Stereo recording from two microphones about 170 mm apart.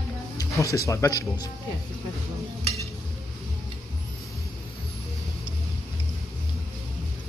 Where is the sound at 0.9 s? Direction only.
20° left (ahead or behind).